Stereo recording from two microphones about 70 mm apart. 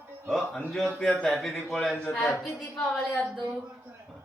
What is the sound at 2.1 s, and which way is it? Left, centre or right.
Mantra, centre.